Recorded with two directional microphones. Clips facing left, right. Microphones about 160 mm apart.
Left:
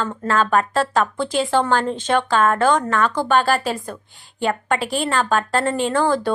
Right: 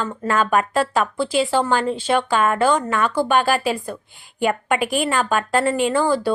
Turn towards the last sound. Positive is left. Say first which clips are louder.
# even
turn(degrees=-10)  # may be behind; listen again after turning